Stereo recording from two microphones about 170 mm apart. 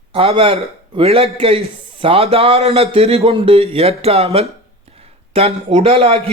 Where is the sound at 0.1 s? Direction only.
35° right (ahead or behind).